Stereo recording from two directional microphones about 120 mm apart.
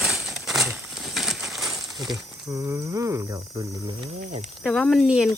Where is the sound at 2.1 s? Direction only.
30° right (ahead or behind).